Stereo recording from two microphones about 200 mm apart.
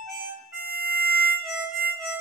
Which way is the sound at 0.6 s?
50° right (ahead or behind).